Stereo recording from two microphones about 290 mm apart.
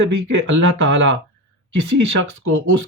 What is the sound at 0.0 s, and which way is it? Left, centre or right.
Speech, right.